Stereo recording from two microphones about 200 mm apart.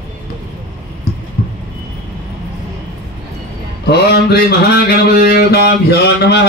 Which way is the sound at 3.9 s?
55° left (ahead or behind).